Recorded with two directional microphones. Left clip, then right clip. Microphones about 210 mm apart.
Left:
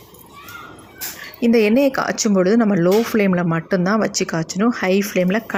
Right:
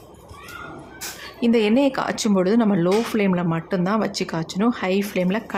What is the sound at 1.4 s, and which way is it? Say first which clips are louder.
Speech: left 4 dB; 15° left (ahead or behind).